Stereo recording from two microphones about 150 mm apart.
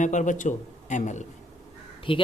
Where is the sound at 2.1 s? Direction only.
35° left (ahead or behind).